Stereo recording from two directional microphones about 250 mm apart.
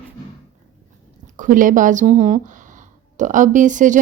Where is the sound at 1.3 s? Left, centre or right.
Right.